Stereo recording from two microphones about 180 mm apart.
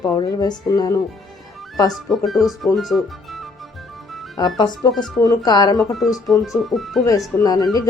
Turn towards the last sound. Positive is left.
turn(degrees=20)  # may be behind; listen again after turning